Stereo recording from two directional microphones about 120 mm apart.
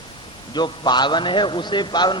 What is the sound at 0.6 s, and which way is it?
A man's voice, 40° left (ahead or behind).